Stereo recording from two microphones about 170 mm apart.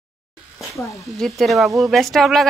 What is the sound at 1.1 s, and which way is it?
A woman's voice, centre (ahead or behind).